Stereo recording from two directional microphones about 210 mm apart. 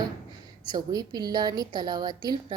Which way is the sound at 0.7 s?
20° right (ahead or behind).